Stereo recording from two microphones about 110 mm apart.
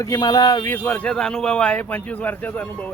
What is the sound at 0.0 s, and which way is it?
Speech, 35° left (ahead or behind).